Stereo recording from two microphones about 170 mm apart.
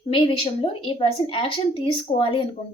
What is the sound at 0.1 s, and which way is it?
A woman's voice, 30° left (ahead or behind).